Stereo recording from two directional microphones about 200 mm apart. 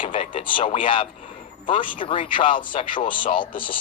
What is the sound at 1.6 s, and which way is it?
Speech, 25° left (ahead or behind).